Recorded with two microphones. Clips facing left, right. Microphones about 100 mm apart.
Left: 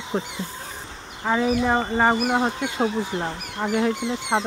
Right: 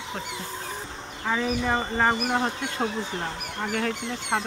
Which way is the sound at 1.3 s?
15° left (ahead or behind).